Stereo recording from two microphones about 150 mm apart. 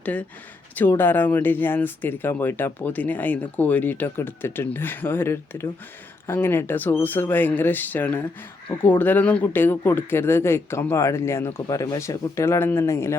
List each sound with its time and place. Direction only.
0.0 s speech: 10° left (ahead or behind)